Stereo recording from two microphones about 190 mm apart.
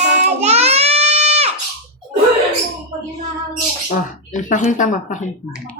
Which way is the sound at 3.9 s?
40° left (ahead or behind).